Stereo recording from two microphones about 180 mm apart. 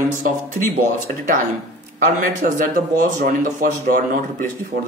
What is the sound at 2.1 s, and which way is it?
Speech, 50° right (ahead or behind).